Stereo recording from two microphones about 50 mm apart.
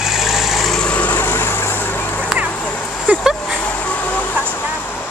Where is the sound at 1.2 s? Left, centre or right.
Left.